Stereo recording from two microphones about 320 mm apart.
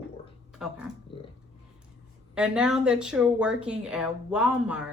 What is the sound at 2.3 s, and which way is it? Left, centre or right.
Speech, centre.